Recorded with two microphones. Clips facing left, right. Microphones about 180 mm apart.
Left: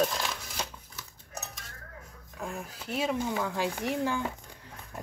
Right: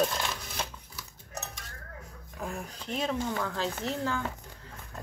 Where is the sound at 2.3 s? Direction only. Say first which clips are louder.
Even; centre (ahead or behind).